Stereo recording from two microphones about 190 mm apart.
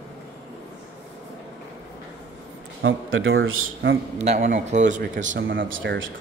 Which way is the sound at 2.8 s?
90° right.